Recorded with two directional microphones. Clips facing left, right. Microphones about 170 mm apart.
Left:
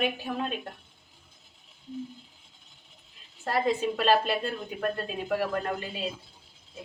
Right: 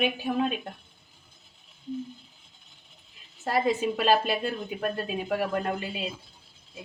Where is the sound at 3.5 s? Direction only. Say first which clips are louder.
Right 1 dB; 10° right (ahead or behind).